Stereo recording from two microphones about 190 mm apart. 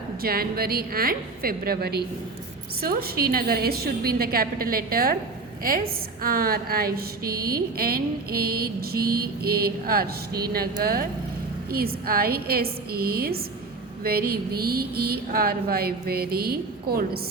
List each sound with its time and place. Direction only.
0.2 s a woman's voice: 50° right (ahead or behind)